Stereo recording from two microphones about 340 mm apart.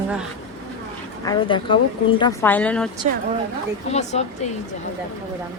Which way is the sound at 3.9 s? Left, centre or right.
Centre.